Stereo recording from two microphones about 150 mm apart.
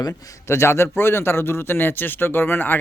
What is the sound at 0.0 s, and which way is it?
A man's voice, 20° left (ahead or behind).